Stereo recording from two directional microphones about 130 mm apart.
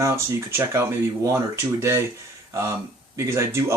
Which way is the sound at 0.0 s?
20° right (ahead or behind).